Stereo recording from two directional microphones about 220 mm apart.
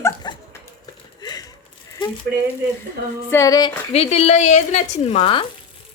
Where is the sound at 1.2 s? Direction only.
15° left (ahead or behind).